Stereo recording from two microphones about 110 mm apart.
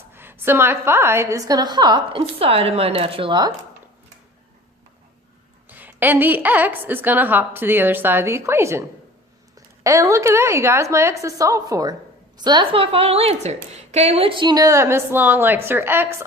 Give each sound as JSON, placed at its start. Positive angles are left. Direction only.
{"t": 0.1, "sound": "a woman's voice", "side_deg": -20}
{"t": 2.4, "sound": "speech", "side_deg": -60}
{"t": 5.6, "sound": "a woman's voice", "side_deg": -15}
{"t": 9.8, "sound": "a woman's voice", "side_deg": -30}
{"t": 12.8, "sound": "a woman's voice", "side_deg": -60}